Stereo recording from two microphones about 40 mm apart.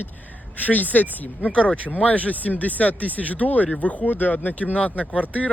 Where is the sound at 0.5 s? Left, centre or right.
Left.